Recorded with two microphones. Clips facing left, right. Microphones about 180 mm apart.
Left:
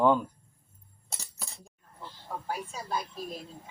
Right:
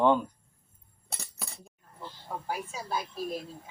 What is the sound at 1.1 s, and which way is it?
Chink, 60° right (ahead or behind).